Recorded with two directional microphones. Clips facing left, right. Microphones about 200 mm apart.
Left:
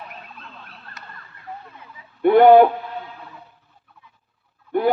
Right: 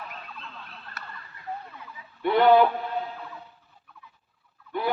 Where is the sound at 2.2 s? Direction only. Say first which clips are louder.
Left 8 dB; 50° left (ahead or behind).